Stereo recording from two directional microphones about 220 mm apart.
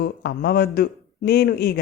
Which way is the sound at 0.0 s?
45° left (ahead or behind).